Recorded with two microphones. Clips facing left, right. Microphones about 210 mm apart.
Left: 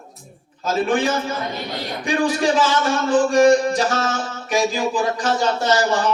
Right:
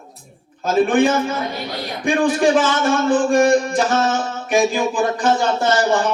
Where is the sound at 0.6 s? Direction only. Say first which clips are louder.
Right 4 dB; 55° right (ahead or behind).